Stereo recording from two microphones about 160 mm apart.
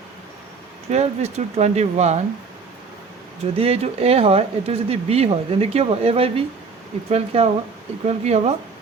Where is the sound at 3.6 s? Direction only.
40° right (ahead or behind).